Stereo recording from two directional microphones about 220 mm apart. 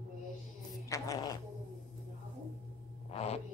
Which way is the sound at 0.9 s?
15° left (ahead or behind).